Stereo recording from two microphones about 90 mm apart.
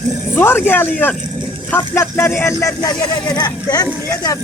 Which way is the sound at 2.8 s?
50° left (ahead or behind).